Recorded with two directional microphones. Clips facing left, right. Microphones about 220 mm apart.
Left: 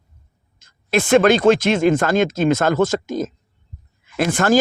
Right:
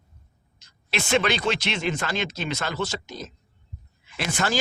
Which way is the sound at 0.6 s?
50° left (ahead or behind).